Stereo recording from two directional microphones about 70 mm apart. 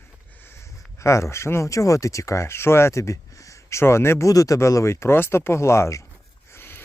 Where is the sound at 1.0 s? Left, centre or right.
Left.